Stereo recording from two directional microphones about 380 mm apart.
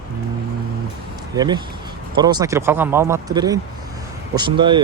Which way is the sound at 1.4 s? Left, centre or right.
Centre.